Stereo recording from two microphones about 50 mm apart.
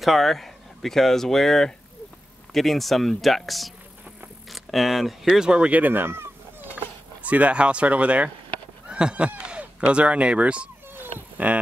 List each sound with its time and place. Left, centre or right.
0.0 s speech: centre
5.4 s speech: centre
5.7 s speech: right
7.2 s speech: right
8.8 s honk: right
9.5 s speech: right
11.0 s cat: right